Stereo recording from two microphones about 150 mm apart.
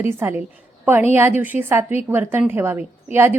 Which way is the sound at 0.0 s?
15° right (ahead or behind).